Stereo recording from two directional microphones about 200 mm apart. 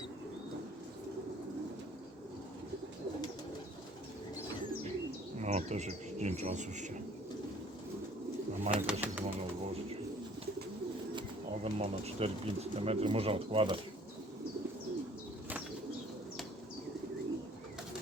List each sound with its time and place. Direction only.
5.4 s speech: 35° right (ahead or behind)
8.7 s speech: 5° right (ahead or behind)
11.6 s speech: 30° right (ahead or behind)